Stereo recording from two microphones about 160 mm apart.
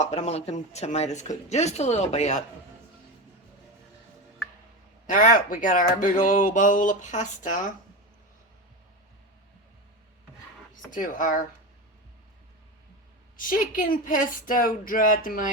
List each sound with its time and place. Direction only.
0.0 s speech: 45° left (ahead or behind)
5.0 s speech: 55° left (ahead or behind)
10.9 s speech: 55° left (ahead or behind)
13.3 s speech: 60° left (ahead or behind)